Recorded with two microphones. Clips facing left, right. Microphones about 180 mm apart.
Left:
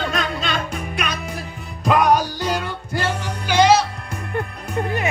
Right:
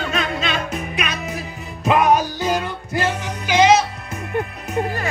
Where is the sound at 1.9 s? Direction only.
5° right (ahead or behind).